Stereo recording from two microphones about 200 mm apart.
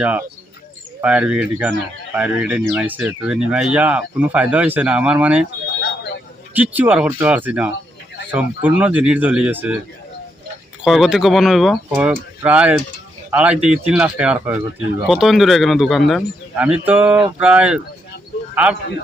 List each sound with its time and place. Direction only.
0.0 s speech: 5° right (ahead or behind)
5.8 s a sound: 55° left (ahead or behind)
6.6 s speech: 10° right (ahead or behind)
10.8 s a man's voice: centre (ahead or behind)